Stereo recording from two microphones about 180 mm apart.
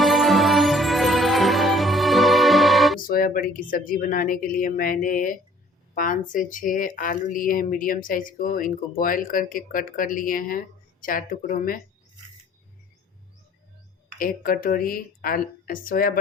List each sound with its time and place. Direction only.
0.0 s music: centre (ahead or behind)
3.1 s speech: 50° left (ahead or behind)
14.2 s speech: 50° left (ahead or behind)